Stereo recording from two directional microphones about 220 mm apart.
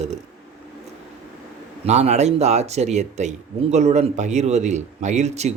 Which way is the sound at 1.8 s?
30° right (ahead or behind).